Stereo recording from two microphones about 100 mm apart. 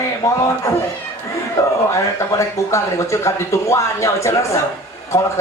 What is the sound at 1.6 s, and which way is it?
Speech, 30° left (ahead or behind).